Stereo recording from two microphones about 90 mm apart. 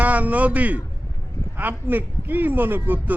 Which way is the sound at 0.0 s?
15° right (ahead or behind).